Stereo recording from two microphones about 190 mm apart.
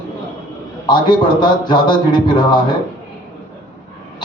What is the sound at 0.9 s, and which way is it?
A man's voice, 25° left (ahead or behind).